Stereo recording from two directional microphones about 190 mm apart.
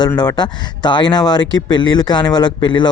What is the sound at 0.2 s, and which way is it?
Speech, 20° left (ahead or behind).